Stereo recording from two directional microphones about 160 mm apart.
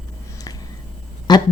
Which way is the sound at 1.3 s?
25° left (ahead or behind).